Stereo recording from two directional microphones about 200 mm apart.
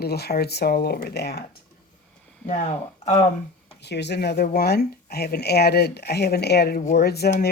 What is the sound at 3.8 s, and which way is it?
Speech, 55° left (ahead or behind).